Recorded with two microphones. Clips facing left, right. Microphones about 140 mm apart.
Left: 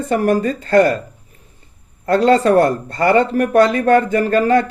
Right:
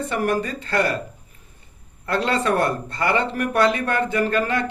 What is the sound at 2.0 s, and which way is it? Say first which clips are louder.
A man's voice: left 9 dB; 40° left (ahead or behind).